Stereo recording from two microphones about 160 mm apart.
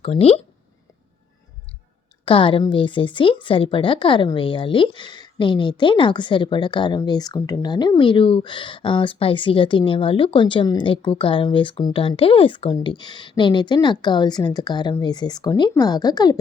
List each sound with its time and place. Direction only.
0.0 s a woman's voice: 35° left (ahead or behind)
2.2 s a woman's voice: 35° left (ahead or behind)